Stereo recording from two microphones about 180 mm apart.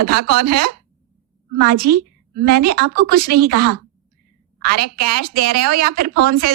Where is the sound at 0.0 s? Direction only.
55° right (ahead or behind).